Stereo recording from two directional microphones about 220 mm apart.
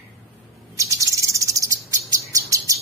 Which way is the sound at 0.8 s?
15° right (ahead or behind).